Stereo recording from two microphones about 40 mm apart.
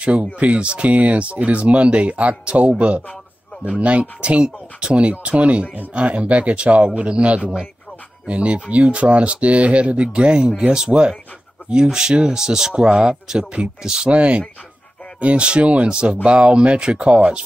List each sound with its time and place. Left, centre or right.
0.0 s speech: right
4.0 s speech: right
12.7 s speech: right
13.5 s speech: right